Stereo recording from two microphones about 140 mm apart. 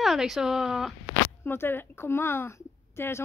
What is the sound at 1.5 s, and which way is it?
Speech, 15° left (ahead or behind).